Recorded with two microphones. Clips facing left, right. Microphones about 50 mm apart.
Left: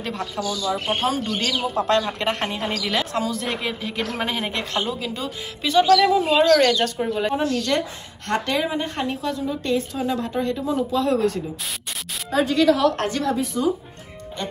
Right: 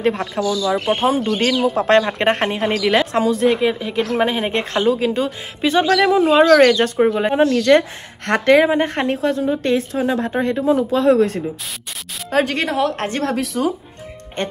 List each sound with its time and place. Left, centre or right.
0.0 s speech: right
3.4 s speech: centre
4.1 s speech: right
4.5 s speech: right
7.4 s speech: right
12.3 s speech: right
12.6 s speech: right
13.2 s a woman's voice: right